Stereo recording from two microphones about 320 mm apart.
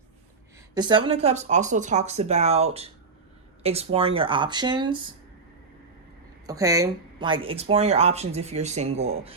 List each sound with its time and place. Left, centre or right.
0.7 s speech: centre
6.5 s speech: centre